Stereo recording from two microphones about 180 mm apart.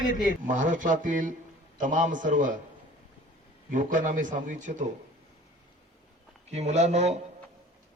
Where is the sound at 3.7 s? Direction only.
45° right (ahead or behind).